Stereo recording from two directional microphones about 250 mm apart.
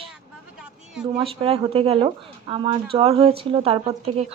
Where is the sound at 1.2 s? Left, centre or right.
Right.